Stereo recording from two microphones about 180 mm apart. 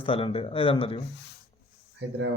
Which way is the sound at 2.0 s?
90° right.